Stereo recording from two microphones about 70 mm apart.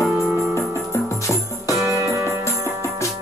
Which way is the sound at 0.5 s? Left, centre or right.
Left.